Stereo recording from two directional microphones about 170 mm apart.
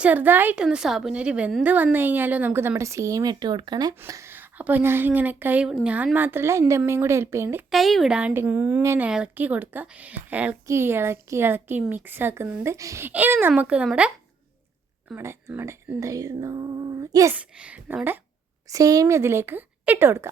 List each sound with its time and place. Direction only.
0.0 s a woman's voice: 10° right (ahead or behind)
7.7 s a woman's voice: centre (ahead or behind)
15.1 s speech: 15° right (ahead or behind)
17.3 s a woman's voice: 5° right (ahead or behind)